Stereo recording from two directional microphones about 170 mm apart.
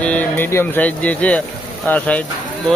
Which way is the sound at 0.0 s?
10° left (ahead or behind).